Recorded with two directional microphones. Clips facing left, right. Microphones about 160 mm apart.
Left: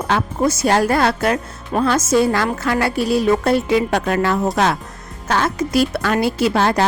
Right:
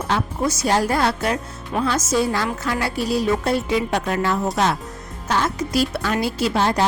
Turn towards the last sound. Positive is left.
turn(degrees=70)  # may be behind; listen again after turning